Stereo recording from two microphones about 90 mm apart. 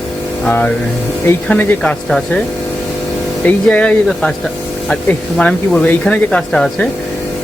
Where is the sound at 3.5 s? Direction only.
15° left (ahead or behind).